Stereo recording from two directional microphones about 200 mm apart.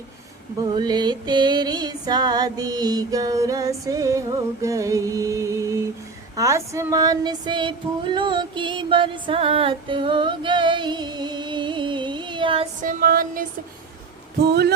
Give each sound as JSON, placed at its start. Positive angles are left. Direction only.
{"t": 0.6, "sound": "music", "side_deg": -20}
{"t": 6.3, "sound": "female singing", "side_deg": -15}
{"t": 12.8, "sound": "music", "side_deg": -45}
{"t": 14.4, "sound": "music", "side_deg": -55}